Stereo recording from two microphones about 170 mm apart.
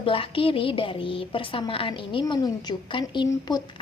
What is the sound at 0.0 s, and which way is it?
A woman's voice, 30° left (ahead or behind).